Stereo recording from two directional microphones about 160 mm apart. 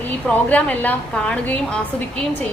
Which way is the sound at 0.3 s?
10° left (ahead or behind).